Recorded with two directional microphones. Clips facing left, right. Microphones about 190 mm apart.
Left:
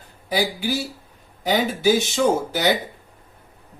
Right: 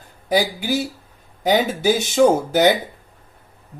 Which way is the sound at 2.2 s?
50° right (ahead or behind).